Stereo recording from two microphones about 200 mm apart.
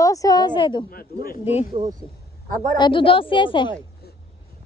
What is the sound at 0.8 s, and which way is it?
Speech, 45° left (ahead or behind).